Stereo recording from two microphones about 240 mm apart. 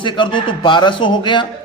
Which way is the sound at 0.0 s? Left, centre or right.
Centre.